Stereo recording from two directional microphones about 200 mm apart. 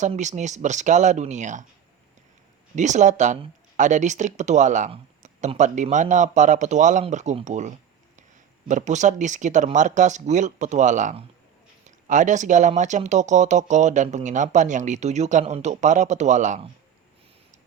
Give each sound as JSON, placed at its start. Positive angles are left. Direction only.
{"t": 0.0, "sound": "speech", "side_deg": -35}
{"t": 2.7, "sound": "speech", "side_deg": -35}